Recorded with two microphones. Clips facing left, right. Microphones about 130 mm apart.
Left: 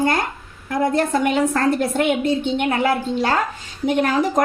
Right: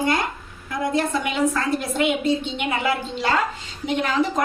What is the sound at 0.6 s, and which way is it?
A woman's voice, 55° left (ahead or behind).